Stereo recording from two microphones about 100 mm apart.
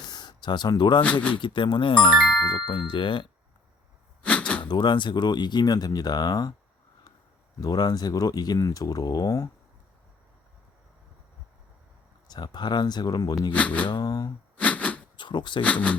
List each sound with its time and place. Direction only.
0.1 s speech: 45° left (ahead or behind)
2.1 s ding: 5° left (ahead or behind)
2.5 s speech: 50° left (ahead or behind)
4.2 s a sound: 15° left (ahead or behind)
4.6 s speech: 50° left (ahead or behind)
7.6 s speech: 40° left (ahead or behind)
12.3 s speech: 45° left (ahead or behind)
13.5 s speech: 15° left (ahead or behind)
13.8 s speech: 45° left (ahead or behind)
14.6 s a sound: 15° left (ahead or behind)
15.1 s speech: 50° left (ahead or behind)
15.6 s speech: 15° left (ahead or behind)